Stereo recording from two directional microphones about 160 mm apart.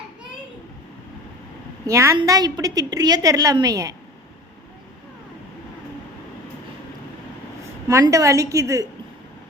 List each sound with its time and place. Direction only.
1.9 s a woman's voice: 15° right (ahead or behind)
7.9 s a woman's voice: 20° right (ahead or behind)